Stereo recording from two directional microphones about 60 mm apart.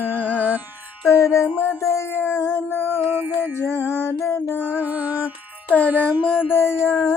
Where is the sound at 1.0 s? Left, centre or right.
Left.